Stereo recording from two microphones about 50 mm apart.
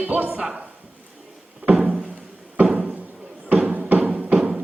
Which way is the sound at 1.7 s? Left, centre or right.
Centre.